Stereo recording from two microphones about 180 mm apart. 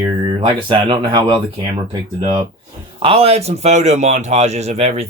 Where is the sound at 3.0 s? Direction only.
30° right (ahead or behind).